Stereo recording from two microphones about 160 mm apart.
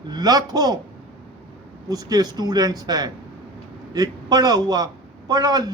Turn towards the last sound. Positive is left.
turn(degrees=-25)  # may be behind; listen again after turning